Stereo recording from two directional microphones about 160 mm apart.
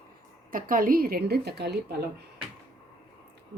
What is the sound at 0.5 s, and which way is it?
A woman's voice, 60° right (ahead or behind).